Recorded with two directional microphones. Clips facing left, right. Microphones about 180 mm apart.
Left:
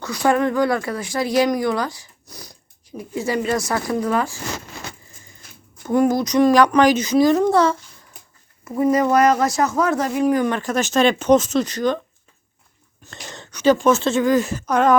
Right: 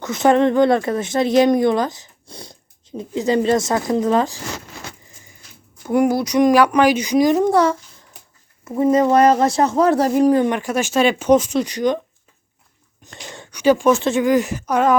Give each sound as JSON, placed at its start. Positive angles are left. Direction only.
{"t": 0.0, "sound": "speech", "side_deg": -20}
{"t": 5.8, "sound": "speech", "side_deg": -10}
{"t": 10.5, "sound": "speech", "side_deg": -10}
{"t": 13.1, "sound": "speech", "side_deg": -10}